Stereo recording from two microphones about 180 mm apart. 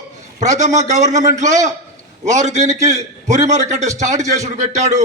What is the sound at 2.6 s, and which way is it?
Speech, 20° right (ahead or behind).